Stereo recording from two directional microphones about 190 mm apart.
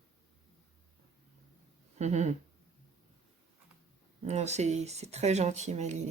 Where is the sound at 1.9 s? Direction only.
35° right (ahead or behind).